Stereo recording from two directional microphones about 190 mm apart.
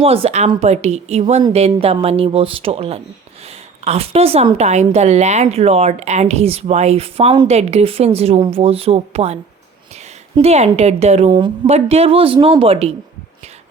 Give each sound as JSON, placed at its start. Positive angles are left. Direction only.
{"t": 0.0, "sound": "a woman's voice", "side_deg": -30}
{"t": 11.3, "sound": "a woman's voice", "side_deg": -25}
{"t": 11.6, "sound": "a woman's voice", "side_deg": -35}